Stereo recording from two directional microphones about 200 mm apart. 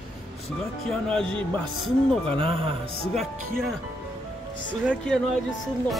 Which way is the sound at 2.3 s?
25° right (ahead or behind).